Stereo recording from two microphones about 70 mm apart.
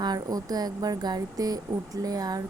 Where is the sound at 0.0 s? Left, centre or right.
Right.